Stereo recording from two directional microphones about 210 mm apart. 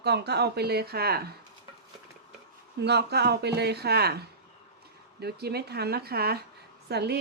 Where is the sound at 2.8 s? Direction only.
50° right (ahead or behind).